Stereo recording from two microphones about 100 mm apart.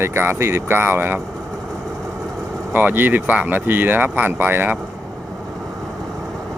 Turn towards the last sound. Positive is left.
turn(degrees=-20)  # may be behind; listen again after turning